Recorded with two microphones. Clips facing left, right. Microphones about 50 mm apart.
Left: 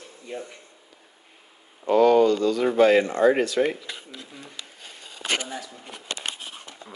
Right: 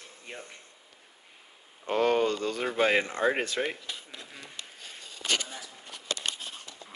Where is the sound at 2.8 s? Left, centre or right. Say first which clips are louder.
Left 7 dB; right.